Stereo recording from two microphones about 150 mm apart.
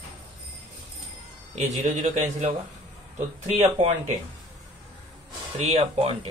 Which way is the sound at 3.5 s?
45° right (ahead or behind).